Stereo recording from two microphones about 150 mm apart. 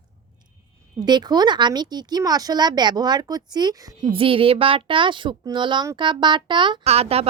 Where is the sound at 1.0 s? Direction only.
30° right (ahead or behind).